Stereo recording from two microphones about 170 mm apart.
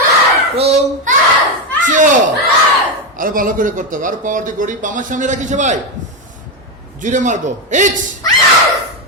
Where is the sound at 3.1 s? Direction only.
55° right (ahead or behind).